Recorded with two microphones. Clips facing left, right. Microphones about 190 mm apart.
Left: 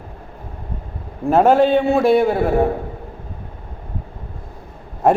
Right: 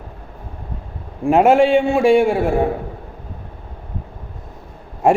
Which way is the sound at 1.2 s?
10° right (ahead or behind).